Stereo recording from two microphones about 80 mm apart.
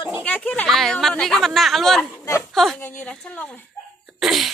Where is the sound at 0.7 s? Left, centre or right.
Centre.